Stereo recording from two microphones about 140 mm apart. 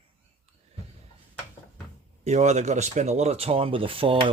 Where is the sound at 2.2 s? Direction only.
55° right (ahead or behind).